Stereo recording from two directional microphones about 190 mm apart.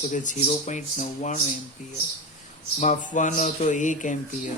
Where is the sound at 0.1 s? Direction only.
40° left (ahead or behind).